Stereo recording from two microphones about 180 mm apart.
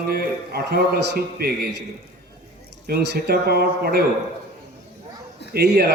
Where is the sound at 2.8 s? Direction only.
60° right (ahead or behind).